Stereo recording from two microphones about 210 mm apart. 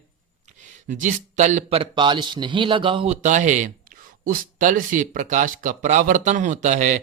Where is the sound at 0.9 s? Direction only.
35° right (ahead or behind).